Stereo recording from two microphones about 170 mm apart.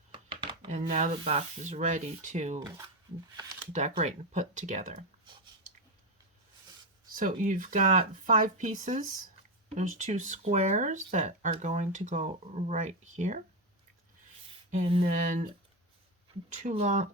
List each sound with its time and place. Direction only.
0.1 s a sound: 30° right (ahead or behind)
0.7 s speech: 45° right (ahead or behind)
3.7 s speech: 45° right (ahead or behind)
7.1 s speech: 50° right (ahead or behind)
14.8 s a sound: 35° right (ahead or behind)
15.1 s speech: 50° right (ahead or behind)
16.7 s speech: 40° right (ahead or behind)